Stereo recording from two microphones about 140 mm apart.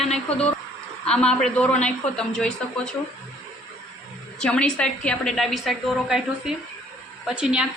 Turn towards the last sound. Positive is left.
turn(degrees=-5)  # may be behind; listen again after turning